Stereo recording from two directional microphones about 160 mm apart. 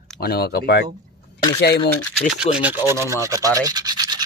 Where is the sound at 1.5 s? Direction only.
90° left.